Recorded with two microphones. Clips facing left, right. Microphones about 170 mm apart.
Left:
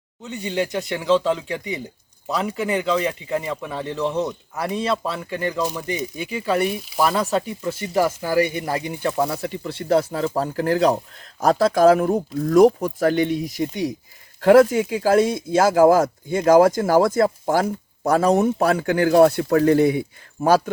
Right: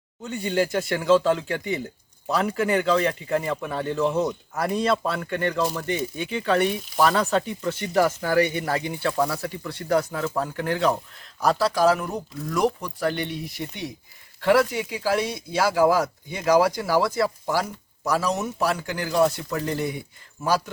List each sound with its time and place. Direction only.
0.2 s speech: centre (ahead or behind); by 10.9 s 35° left (ahead or behind)
11.3 s speech: 45° left (ahead or behind)